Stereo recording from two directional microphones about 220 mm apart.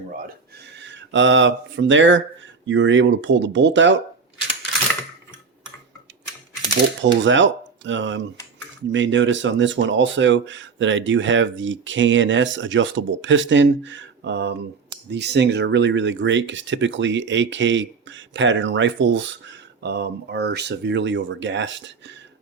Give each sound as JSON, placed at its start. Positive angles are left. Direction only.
{"t": 0.8, "sound": "speech", "side_deg": -55}
{"t": 7.0, "sound": "speech", "side_deg": -55}